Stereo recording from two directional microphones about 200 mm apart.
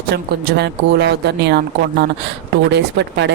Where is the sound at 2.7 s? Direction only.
60° right (ahead or behind).